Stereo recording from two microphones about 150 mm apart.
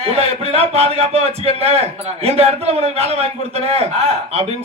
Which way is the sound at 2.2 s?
45° right (ahead or behind).